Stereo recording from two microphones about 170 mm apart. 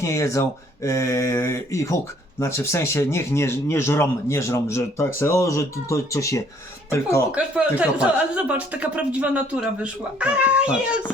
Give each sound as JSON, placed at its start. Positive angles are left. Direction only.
{"t": 0.0, "sound": "speech", "side_deg": 20}
{"t": 7.3, "sound": "speech", "side_deg": -5}